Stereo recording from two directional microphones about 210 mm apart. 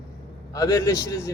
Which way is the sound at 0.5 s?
15° left (ahead or behind).